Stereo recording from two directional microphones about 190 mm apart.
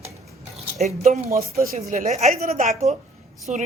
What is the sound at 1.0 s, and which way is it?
A woman's voice, 35° right (ahead or behind).